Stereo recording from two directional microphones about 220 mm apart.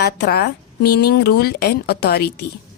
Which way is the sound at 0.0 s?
45° left (ahead or behind).